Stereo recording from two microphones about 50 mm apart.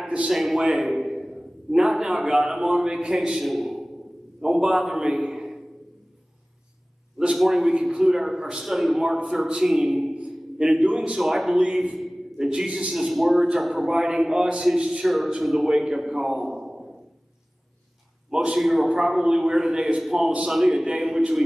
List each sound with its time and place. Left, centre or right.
0.3 s a man's voice: centre
0.6 s a sound: centre
1.9 s a man's voice: centre
4.4 s a man's voice: centre
7.3 s a man's voice: centre
10.1 s a sound: right
10.9 s a man's voice: centre
12.9 s a man's voice: centre
15.0 s a man's voice: centre
16.1 s a sound: centre
18.3 s a man's voice: centre
18.6 s a man's voice: centre